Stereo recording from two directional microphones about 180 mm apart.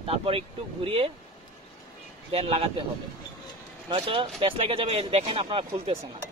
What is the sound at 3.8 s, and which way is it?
Speech, 25° right (ahead or behind).